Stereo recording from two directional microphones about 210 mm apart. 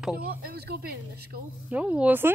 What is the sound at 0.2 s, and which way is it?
Speech, 45° right (ahead or behind).